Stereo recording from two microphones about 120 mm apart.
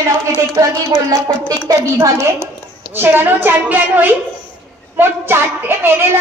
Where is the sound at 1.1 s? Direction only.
30° right (ahead or behind).